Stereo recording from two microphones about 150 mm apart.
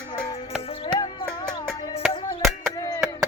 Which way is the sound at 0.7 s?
40° left (ahead or behind).